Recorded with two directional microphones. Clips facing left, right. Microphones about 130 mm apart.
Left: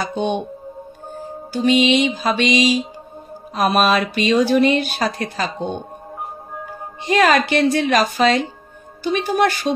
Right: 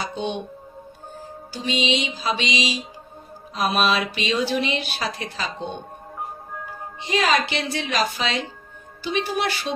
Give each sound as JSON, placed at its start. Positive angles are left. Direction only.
{"t": 0.0, "sound": "speech", "side_deg": 50}
{"t": 1.5, "sound": "speech", "side_deg": 50}
{"t": 7.1, "sound": "speech", "side_deg": 50}